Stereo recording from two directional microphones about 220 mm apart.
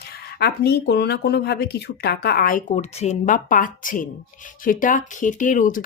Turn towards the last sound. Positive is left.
turn(degrees=35)  # may be behind; listen again after turning